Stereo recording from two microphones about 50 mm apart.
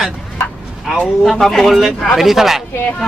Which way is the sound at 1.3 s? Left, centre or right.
Centre.